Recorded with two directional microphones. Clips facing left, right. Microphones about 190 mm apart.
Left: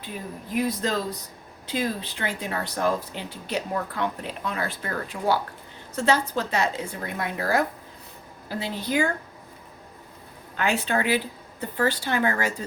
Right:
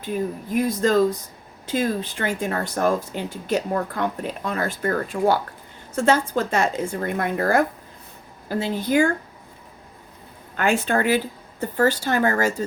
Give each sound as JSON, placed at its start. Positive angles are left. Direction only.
{"t": 0.5, "sound": "speech", "side_deg": -45}
{"t": 10.6, "sound": "speech", "side_deg": -50}